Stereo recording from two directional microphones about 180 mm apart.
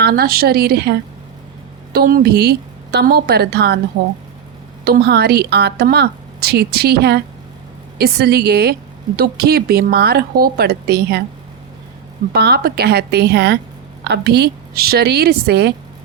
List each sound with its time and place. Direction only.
0.0 s a woman's voice: 60° right (ahead or behind)
4.9 s a woman's voice: 60° right (ahead or behind)
12.3 s a woman's voice: 60° right (ahead or behind)